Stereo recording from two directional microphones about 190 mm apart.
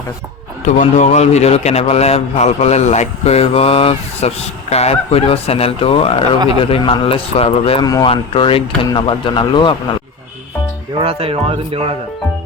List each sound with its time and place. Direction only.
0.6 s a man's voice: 40° left (ahead or behind); by 9.7 s 25° left (ahead or behind)
11.0 s speech: 30° right (ahead or behind)